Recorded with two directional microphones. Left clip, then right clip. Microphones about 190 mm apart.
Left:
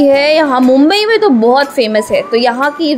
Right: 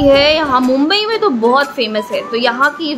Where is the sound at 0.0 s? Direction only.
25° left (ahead or behind).